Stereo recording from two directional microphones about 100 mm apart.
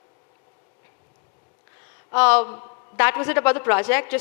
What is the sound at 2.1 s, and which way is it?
A man's voice, 20° left (ahead or behind).